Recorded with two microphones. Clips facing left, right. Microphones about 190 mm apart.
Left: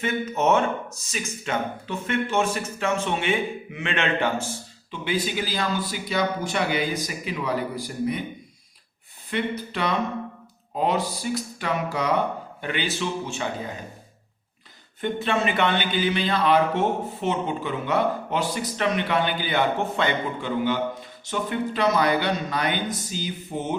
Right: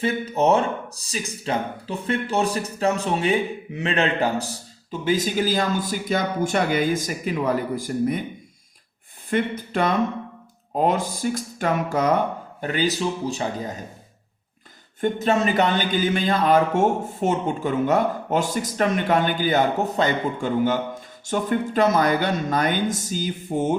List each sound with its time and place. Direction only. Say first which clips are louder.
0.0 s speech: right 3 dB; 35° right (ahead or behind); by 8.2 s 50° right (ahead or behind)
9.3 s speech: right 4 dB; 50° right (ahead or behind)
15.0 s speech: right 4 dB; 40° right (ahead or behind)